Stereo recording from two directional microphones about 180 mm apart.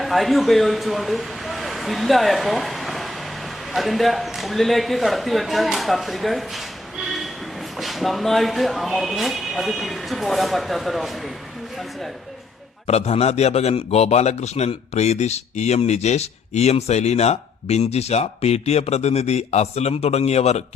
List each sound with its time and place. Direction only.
0.0 s speech: centre (ahead or behind)
7.0 s train: centre (ahead or behind)
7.8 s speech: centre (ahead or behind)
12.9 s a man's voice: 35° left (ahead or behind)